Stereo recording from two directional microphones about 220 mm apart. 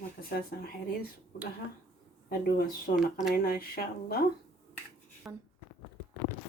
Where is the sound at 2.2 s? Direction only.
40° left (ahead or behind).